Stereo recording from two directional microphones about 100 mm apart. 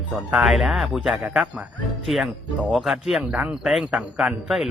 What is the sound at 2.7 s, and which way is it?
A man's voice, centre (ahead or behind).